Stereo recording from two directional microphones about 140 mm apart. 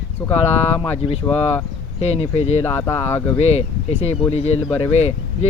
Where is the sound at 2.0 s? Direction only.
50° left (ahead or behind).